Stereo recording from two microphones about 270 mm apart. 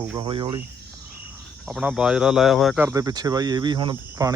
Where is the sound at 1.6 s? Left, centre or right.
Centre.